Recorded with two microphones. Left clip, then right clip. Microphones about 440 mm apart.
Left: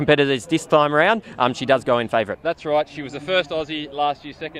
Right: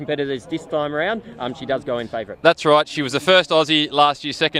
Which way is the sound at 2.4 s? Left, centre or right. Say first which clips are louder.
Right 7 dB; right.